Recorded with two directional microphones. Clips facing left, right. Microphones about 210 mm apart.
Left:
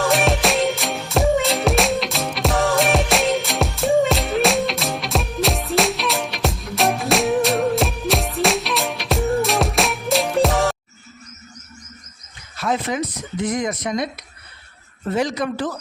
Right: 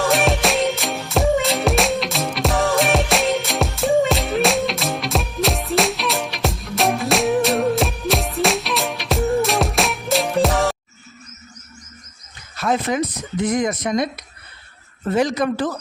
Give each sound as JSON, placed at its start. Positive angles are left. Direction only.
{"t": 0.0, "sound": "music", "side_deg": 0}
{"t": 12.5, "sound": "a sound", "side_deg": -50}
{"t": 13.4, "sound": "speech", "side_deg": -50}
{"t": 15.1, "sound": "speech", "side_deg": -50}